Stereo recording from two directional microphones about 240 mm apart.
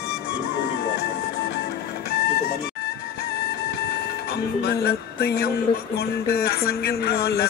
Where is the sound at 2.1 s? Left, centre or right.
Left.